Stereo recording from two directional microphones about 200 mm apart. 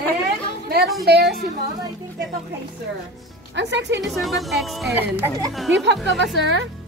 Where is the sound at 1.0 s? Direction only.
55° right (ahead or behind).